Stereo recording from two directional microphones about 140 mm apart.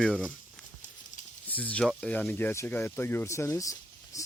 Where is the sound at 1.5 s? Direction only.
10° left (ahead or behind).